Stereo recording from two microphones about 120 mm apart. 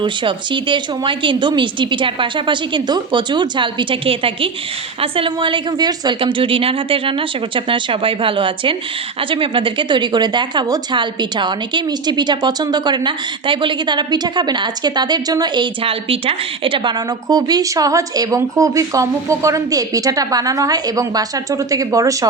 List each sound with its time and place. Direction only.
0.0 s speech: 45° right (ahead or behind)